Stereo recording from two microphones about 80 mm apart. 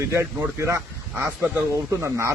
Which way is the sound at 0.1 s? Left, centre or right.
Right.